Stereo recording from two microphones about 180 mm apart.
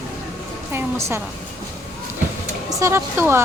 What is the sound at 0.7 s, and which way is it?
Speech, 15° right (ahead or behind).